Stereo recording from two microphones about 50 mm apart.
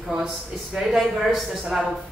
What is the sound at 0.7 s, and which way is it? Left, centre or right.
Speech, centre.